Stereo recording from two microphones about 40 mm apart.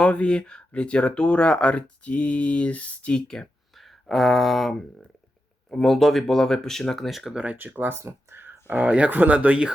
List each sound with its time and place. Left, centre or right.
0.0 s speech: left
3.2 s speech: centre
4.0 s a sound: centre
5.8 s speech: centre
7.1 s a sound: centre
7.5 s speech: right
8.7 s speech: right